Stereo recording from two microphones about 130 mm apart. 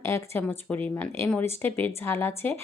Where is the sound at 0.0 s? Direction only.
20° left (ahead or behind).